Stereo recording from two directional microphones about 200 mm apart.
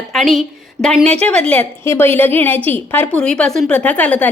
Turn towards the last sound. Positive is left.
turn(degrees=10)  # may be behind; listen again after turning